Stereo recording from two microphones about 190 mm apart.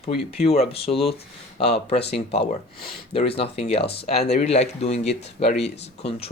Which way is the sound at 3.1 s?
30° left (ahead or behind).